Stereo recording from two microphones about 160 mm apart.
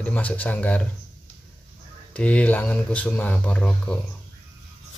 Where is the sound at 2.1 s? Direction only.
10° left (ahead or behind).